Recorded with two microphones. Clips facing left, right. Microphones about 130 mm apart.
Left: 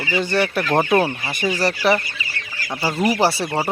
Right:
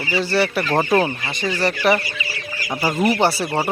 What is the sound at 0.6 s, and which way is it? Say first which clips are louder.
Speech: even; 5° left (ahead or behind).